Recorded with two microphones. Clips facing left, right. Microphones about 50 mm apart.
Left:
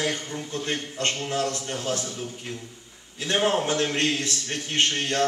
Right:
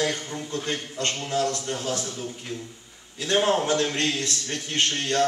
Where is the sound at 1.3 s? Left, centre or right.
Left.